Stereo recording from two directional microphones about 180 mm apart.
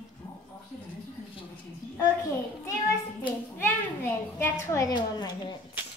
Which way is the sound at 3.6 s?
15° left (ahead or behind).